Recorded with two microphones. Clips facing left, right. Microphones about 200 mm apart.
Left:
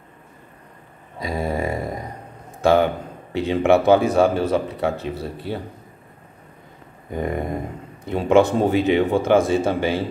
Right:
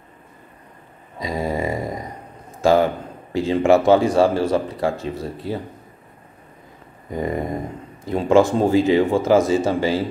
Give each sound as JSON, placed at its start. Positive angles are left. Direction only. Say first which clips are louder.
{"t": 1.2, "sound": "a sound", "louder": "right 1 dB", "side_deg": 0}
{"t": 3.3, "sound": "speech", "louder": "right 1 dB", "side_deg": 0}
{"t": 4.4, "sound": "speech", "louder": "right 1 dB", "side_deg": -35}
{"t": 5.0, "sound": "speech", "louder": "right 1 dB", "side_deg": 0}
{"t": 7.1, "sound": "speech", "louder": "right 1 dB", "side_deg": 0}